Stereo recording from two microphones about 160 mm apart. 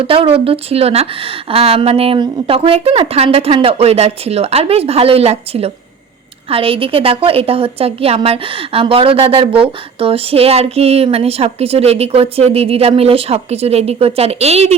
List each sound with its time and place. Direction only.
0.0 s a woman's voice: 35° right (ahead or behind)